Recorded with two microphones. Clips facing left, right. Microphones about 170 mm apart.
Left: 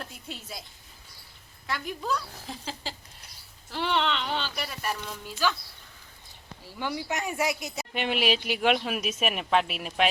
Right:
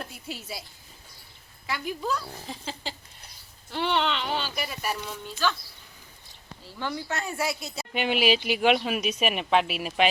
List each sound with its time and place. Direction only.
0.0 s a sound: 5° right (ahead or behind)
1.6 s speech: 5° right (ahead or behind)
5.2 s speech: 10° left (ahead or behind)
6.7 s speech: 10° left (ahead or behind)
7.9 s speech: centre (ahead or behind)